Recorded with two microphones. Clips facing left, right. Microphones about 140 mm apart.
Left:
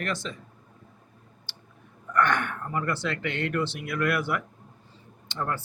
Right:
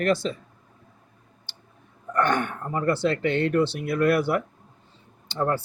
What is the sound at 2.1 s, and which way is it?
Speech, 30° right (ahead or behind).